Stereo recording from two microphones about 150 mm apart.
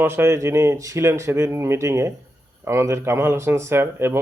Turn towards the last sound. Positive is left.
turn(degrees=-15)  # may be behind; listen again after turning